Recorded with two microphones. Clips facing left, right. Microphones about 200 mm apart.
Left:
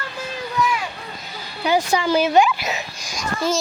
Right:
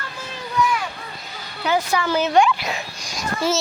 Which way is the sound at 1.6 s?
15° left (ahead or behind).